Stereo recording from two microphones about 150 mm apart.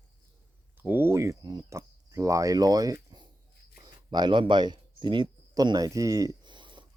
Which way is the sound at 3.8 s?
30° right (ahead or behind).